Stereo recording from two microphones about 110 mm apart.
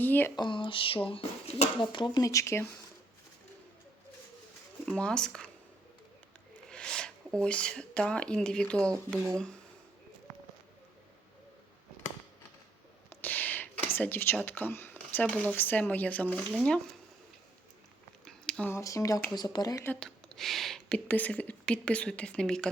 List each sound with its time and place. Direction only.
0.0 s speech: 20° left (ahead or behind)
0.3 s speech: 45° left (ahead or behind); by 1.7 s 80° left
1.8 s speech: 45° left (ahead or behind)
2.2 s speech: 30° left (ahead or behind)
4.9 s a woman's voice: 10° left (ahead or behind)
6.7 s speech: 5° left (ahead or behind)
13.1 s speech: 15° left (ahead or behind)
18.3 s a sound: 5° left (ahead or behind)
18.7 s speech: 30° left (ahead or behind)
20.0 s speech: 5° left (ahead or behind)
21.1 s a woman's voice: 15° left (ahead or behind)